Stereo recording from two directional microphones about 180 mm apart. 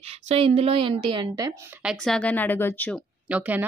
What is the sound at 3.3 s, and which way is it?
Speech, 10° right (ahead or behind).